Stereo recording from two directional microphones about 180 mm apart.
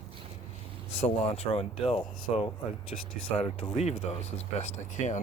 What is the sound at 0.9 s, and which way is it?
Speech, 35° left (ahead or behind).